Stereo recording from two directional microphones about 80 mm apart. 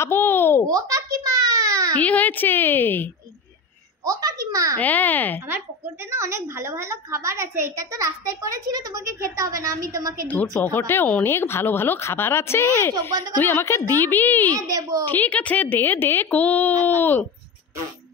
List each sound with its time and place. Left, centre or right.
0.0 s speech: left
0.7 s a sound: right
2.0 s speech: centre
4.0 s a woman's voice: right
4.7 s speech: left
6.0 s a woman's voice: right
10.2 s speech: left
14.5 s a woman's voice: right
15.0 s speech: left